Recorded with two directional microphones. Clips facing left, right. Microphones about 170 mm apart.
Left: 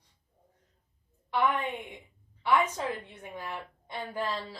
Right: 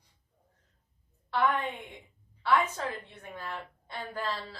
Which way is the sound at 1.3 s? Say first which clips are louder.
Even; 15° left (ahead or behind).